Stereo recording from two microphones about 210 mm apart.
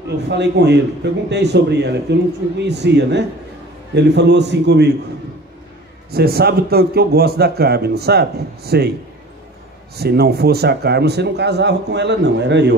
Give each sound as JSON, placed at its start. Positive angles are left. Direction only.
{"t": 0.3, "sound": "a man's voice", "side_deg": -55}
{"t": 6.1, "sound": "speech", "side_deg": -50}
{"t": 9.9, "sound": "speech", "side_deg": -50}